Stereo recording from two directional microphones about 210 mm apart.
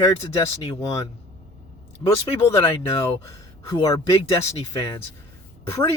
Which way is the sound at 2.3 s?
15° left (ahead or behind).